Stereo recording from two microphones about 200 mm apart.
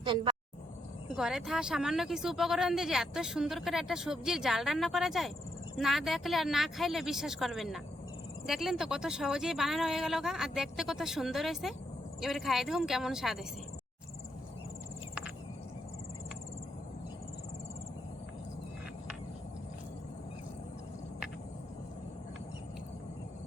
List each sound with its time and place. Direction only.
0.0 s speech: 25° right (ahead or behind)
1.1 s speech: centre (ahead or behind)